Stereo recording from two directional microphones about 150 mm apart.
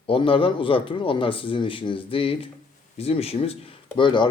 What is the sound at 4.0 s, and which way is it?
Speech, 30° left (ahead or behind).